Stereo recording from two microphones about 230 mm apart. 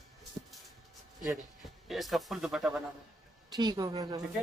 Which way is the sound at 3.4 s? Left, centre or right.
Centre.